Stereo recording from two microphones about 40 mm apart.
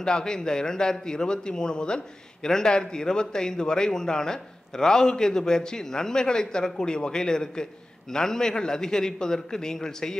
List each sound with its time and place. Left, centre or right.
0.0 s a man's voice: centre